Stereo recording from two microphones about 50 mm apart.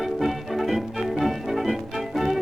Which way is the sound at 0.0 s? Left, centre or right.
Centre.